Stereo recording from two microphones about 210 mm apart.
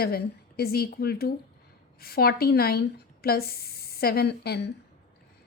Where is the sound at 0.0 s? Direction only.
45° left (ahead or behind).